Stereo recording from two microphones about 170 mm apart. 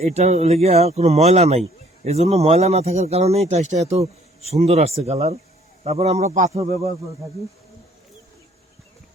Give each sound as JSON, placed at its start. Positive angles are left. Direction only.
{"t": 0.0, "sound": "speech", "side_deg": -40}